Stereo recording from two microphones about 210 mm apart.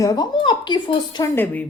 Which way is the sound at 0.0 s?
20° left (ahead or behind).